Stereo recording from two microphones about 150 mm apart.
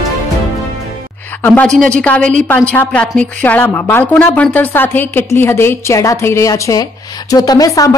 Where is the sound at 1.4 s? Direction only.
10° left (ahead or behind).